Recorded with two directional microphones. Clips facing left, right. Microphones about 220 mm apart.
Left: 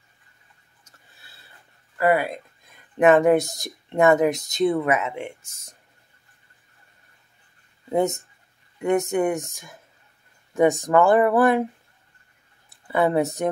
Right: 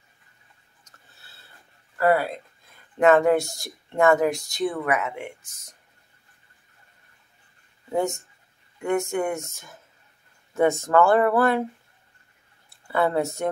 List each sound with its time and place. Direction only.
2.0 s speech: 15° left (ahead or behind)
7.9 s speech: 20° left (ahead or behind)
12.6 s speech: 15° left (ahead or behind)